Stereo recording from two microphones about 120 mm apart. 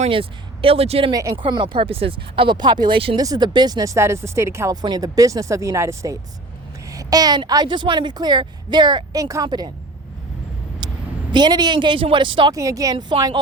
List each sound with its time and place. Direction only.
0.1 s speech: 50° right (ahead or behind)
1.1 s a woman's voice: 30° right (ahead or behind)
1.4 s speech: 45° right (ahead or behind)
3.2 s speech: 35° right (ahead or behind)
4.7 s a woman's voice: 35° right (ahead or behind)
10.8 s vehicle: 35° right (ahead or behind)
11.3 s a woman's voice: 35° right (ahead or behind)
12.5 s a woman's voice: 30° right (ahead or behind)